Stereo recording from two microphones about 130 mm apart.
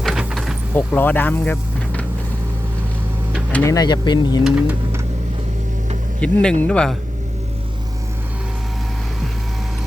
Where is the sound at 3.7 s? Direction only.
30° left (ahead or behind).